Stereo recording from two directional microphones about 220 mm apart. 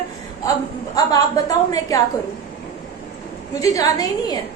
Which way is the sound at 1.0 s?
15° left (ahead or behind).